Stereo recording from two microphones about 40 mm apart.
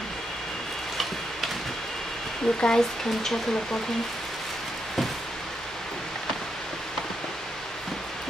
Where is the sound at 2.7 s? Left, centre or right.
Centre.